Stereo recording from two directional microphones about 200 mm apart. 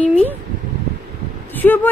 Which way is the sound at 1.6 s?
5° left (ahead or behind).